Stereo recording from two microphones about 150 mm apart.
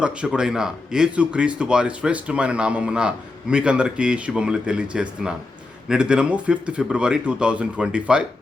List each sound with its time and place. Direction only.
0.0 s a man's voice: 5° right (ahead or behind)